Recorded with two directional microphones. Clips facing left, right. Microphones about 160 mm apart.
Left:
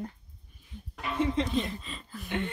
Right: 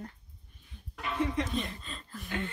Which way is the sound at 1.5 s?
Centre (ahead or behind).